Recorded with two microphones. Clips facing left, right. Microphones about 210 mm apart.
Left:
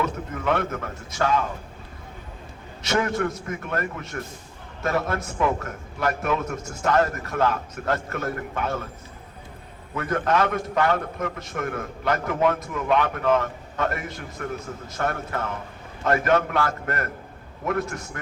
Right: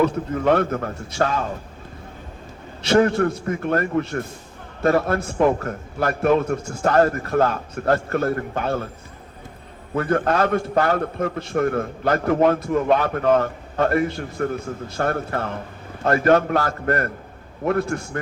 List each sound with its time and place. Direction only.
0.0 s a man's voice: 40° right (ahead or behind)
2.8 s a man's voice: 30° right (ahead or behind)
9.9 s a man's voice: 35° right (ahead or behind)